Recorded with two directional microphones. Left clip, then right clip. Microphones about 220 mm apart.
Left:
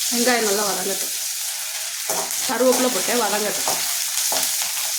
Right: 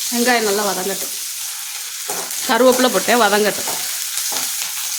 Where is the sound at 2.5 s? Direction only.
45° right (ahead or behind).